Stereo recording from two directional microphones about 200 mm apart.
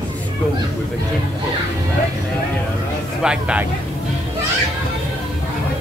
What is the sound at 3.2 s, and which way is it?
Speech, 5° right (ahead or behind).